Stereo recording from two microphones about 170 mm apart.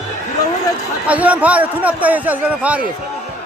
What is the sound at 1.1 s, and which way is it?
A man's voice, 10° right (ahead or behind).